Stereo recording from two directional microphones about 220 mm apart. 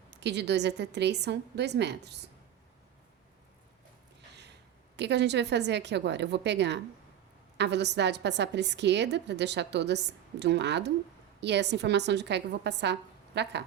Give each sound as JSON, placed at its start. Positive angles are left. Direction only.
{"t": 0.1, "sound": "a woman's voice", "side_deg": -50}
{"t": 4.9, "sound": "a woman's voice", "side_deg": -50}